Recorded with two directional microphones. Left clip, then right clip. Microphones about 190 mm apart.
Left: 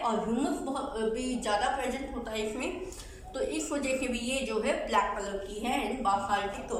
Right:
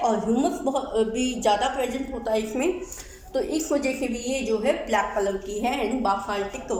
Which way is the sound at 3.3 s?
30° right (ahead or behind).